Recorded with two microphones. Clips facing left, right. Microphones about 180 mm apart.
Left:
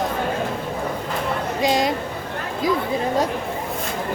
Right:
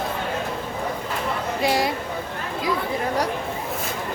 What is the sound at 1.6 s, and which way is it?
Speech, 20° left (ahead or behind).